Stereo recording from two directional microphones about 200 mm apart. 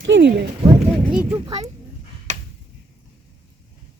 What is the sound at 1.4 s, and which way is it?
Speech, 30° right (ahead or behind).